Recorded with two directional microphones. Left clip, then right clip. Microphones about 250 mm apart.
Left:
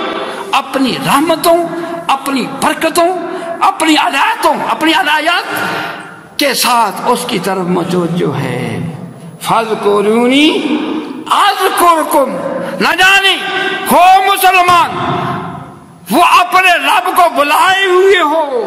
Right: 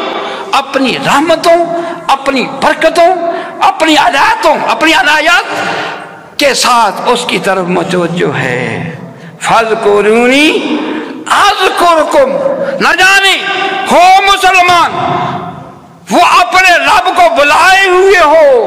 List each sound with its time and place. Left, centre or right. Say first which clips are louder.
0.5 s a woman's voice: right 3 dB; left
6.4 s a man's voice: right 4 dB; left
11.3 s a sound: right 3 dB; left
12.7 s a man's voice: right 1 dB; left
16.1 s a man's voice: right 2 dB; left